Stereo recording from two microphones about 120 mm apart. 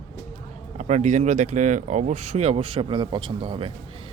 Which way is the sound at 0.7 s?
75° right (ahead or behind).